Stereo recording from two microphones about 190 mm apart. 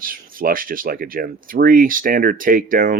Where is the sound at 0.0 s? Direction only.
50° right (ahead or behind).